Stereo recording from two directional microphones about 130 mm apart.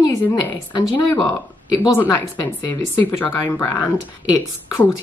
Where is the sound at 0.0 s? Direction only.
25° left (ahead or behind).